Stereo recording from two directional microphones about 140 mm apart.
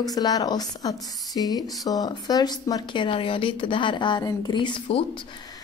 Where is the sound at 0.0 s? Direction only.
25° left (ahead or behind).